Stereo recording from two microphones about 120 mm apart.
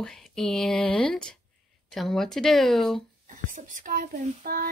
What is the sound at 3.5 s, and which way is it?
Speech, 90° right.